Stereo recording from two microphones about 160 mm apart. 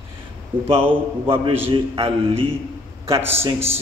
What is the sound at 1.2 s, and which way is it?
A man's voice, 35° right (ahead or behind).